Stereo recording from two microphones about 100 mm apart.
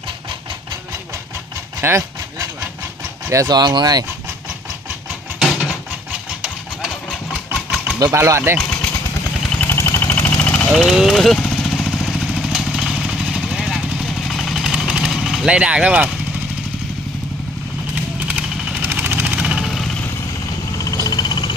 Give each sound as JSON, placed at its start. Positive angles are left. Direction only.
{"t": 1.8, "sound": "speech", "side_deg": -25}
{"t": 3.2, "sound": "speech", "side_deg": -30}
{"t": 3.5, "sound": "speech", "side_deg": -45}
{"t": 5.6, "sound": "a sound", "side_deg": -10}
{"t": 7.1, "sound": "engine", "side_deg": -10}
{"t": 7.9, "sound": "speech", "side_deg": -35}
{"t": 9.6, "sound": "vehicle", "side_deg": 25}
{"t": 10.8, "sound": "vehicle", "side_deg": 0}
{"t": 18.8, "sound": "vehicle", "side_deg": -20}
{"t": 20.9, "sound": "frog", "side_deg": 40}